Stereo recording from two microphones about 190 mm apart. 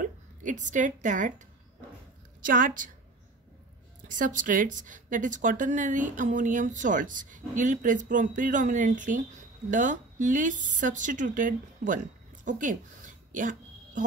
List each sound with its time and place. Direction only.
0.0 s a sound: 40° right (ahead or behind)
2.4 s speech: 45° right (ahead or behind)
4.1 s speech: 45° right (ahead or behind)